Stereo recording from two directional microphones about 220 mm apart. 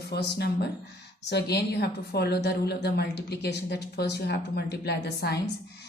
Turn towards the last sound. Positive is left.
turn(degrees=50)  # may be behind; listen again after turning